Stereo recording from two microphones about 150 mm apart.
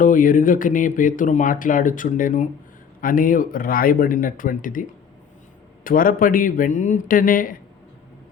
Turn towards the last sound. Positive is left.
turn(degrees=65)  # may be behind; listen again after turning